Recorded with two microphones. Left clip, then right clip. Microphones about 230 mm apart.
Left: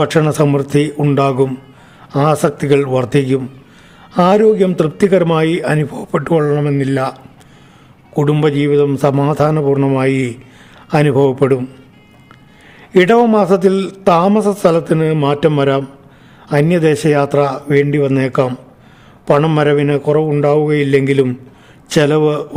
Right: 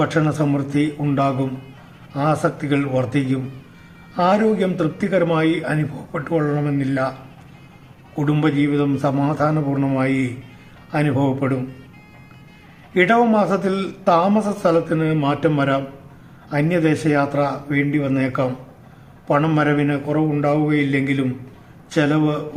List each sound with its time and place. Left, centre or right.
0.0 s a man's voice: left
8.1 s a man's voice: left
12.9 s a man's voice: left